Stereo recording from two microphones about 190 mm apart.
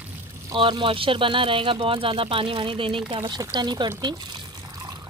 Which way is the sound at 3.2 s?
20° right (ahead or behind).